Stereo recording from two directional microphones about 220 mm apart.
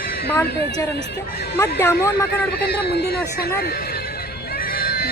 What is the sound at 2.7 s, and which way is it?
Speech, 45° left (ahead or behind).